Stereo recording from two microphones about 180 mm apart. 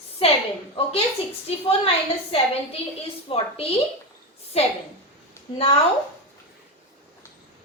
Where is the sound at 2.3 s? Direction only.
30° left (ahead or behind).